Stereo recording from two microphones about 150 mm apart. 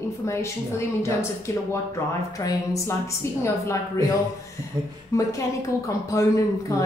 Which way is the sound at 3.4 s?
20° left (ahead or behind).